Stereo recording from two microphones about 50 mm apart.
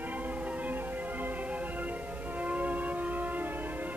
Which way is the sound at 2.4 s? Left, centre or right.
Right.